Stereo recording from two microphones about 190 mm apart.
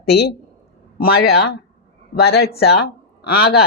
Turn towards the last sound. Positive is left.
turn(degrees=60)  # may be behind; listen again after turning